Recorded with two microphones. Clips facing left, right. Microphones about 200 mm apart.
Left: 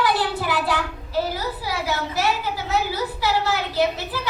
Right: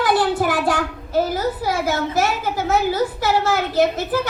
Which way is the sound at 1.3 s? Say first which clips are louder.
Right 6 dB; 50° right (ahead or behind).